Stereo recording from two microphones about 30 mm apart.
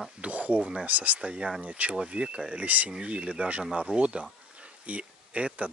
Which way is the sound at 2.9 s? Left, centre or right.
Right.